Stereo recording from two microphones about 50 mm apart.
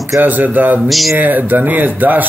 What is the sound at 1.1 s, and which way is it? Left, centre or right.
Speech, right.